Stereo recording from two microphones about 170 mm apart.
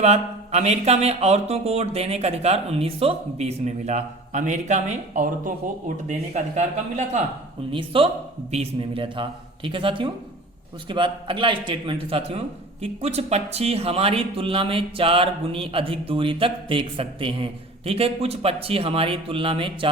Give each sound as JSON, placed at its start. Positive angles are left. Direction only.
{"t": 0.0, "sound": "speech", "side_deg": -40}
{"t": 7.7, "sound": "a man's voice", "side_deg": -30}